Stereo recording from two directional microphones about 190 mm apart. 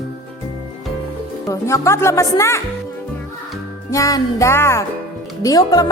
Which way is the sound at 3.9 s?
15° left (ahead or behind).